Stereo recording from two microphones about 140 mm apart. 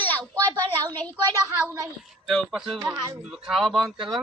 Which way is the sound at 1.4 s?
15° right (ahead or behind).